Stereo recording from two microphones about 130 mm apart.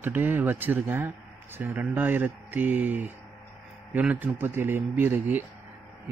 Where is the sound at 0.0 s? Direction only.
15° right (ahead or behind).